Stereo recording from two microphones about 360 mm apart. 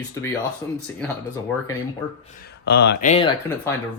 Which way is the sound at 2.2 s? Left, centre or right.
Left.